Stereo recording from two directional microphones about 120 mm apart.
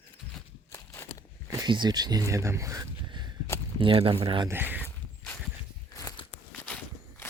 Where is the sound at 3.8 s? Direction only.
45° right (ahead or behind).